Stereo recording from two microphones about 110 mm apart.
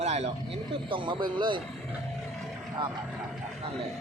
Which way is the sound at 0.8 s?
50° right (ahead or behind).